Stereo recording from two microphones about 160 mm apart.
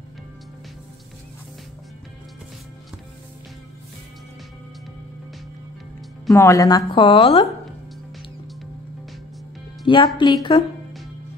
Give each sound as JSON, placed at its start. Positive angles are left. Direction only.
{"t": 6.3, "sound": "speech", "side_deg": 20}
{"t": 6.9, "sound": "speech", "side_deg": 30}
{"t": 9.8, "sound": "speech", "side_deg": 30}